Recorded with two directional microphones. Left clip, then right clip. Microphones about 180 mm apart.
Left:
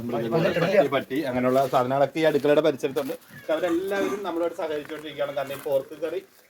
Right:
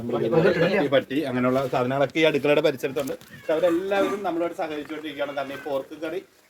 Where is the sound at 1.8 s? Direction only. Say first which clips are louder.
Even; 25° right (ahead or behind).